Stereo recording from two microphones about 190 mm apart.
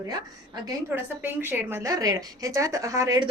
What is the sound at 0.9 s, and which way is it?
A woman's voice, 10° right (ahead or behind).